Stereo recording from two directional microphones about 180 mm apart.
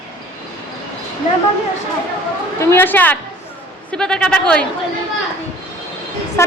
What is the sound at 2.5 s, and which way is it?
A woman's voice, 10° left (ahead or behind).